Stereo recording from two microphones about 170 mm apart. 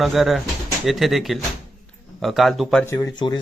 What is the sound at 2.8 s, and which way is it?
Speech, 20° left (ahead or behind).